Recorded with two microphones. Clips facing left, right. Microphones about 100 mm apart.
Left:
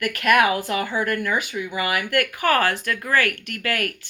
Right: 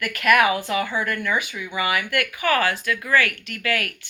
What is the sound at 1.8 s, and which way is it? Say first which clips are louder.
A woman's voice: even; 45° left (ahead or behind).